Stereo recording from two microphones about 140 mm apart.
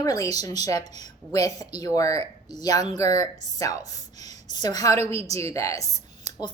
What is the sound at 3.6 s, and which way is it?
A woman's voice, 25° left (ahead or behind).